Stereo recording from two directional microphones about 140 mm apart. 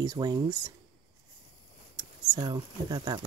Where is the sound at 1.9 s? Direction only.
25° right (ahead or behind).